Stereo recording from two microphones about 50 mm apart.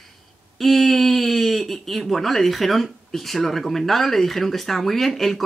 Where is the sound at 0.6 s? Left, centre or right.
Centre.